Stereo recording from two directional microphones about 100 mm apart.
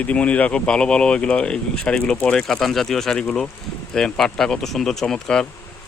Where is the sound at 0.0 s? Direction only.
10° left (ahead or behind).